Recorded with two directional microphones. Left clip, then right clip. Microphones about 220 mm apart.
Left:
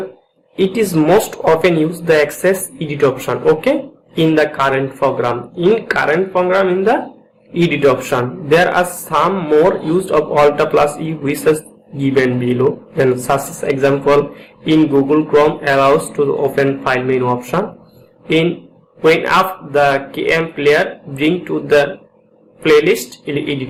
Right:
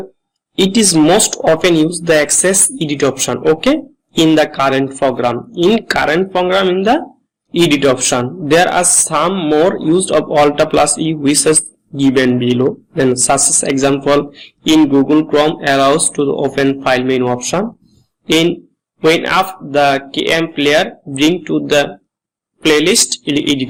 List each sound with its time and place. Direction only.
0.5 s speech: 40° right (ahead or behind)
19.0 s speech: 45° right (ahead or behind)
23.2 s speech: 45° right (ahead or behind)